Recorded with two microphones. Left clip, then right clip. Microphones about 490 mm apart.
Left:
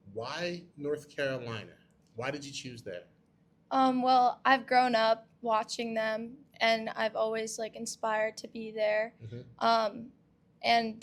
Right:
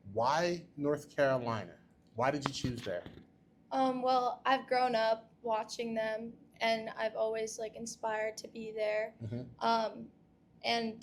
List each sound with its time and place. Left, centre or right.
0.2 s speech: centre
3.7 s a woman's voice: left